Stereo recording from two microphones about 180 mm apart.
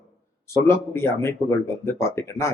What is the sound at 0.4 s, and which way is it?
Speech, 15° left (ahead or behind).